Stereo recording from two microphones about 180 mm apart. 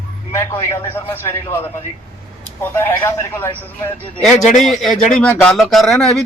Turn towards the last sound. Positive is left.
turn(degrees=0)  # may be behind; listen again after turning